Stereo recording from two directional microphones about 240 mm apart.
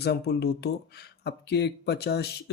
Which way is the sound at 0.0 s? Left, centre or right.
Left.